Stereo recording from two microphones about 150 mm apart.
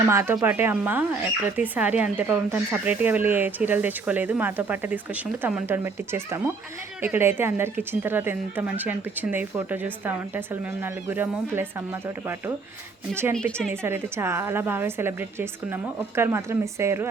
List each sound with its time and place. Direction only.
0.1 s a woman's voice: 15° right (ahead or behind)
13.8 s a woman's voice: 15° right (ahead or behind)